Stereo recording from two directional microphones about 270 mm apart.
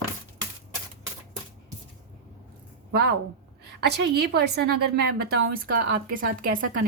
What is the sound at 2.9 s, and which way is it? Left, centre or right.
A woman's voice, right.